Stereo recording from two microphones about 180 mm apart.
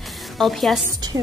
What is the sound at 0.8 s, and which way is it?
Speech, 20° right (ahead or behind).